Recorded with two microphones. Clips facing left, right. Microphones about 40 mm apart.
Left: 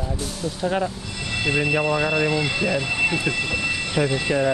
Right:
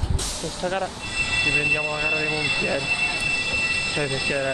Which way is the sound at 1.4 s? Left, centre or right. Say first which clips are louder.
Left 3 dB; centre.